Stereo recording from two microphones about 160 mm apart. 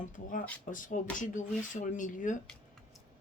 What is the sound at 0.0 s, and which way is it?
Speech, 55° left (ahead or behind).